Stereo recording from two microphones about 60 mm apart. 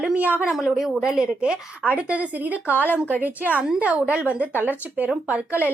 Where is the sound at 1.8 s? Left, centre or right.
Right.